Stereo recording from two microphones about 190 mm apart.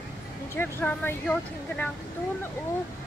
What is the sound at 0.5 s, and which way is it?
Speech, 10° left (ahead or behind).